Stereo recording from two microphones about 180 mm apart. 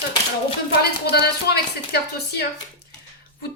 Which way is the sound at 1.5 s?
65° left (ahead or behind).